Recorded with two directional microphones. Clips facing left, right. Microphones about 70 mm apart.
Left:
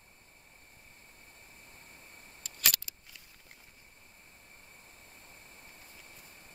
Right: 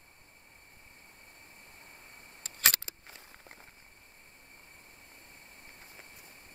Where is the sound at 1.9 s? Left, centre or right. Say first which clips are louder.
Right 1 dB; right.